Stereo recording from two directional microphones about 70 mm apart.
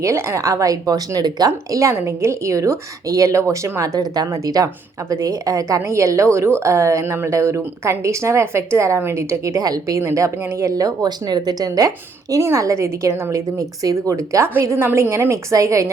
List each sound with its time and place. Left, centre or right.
0.0 s speech: right
0.4 s speech: right
4.3 s speech: right
5.8 s speech: right
10.0 s speech: right
12.4 s speech: right
13.6 s speech: right
14.6 s a woman's voice: right
14.8 s a woman's voice: right
15.1 s speech: right